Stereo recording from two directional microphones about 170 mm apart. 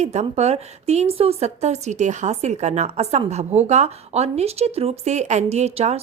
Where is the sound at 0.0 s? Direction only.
40° right (ahead or behind).